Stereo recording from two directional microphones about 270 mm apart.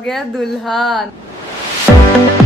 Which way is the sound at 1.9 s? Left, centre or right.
Centre.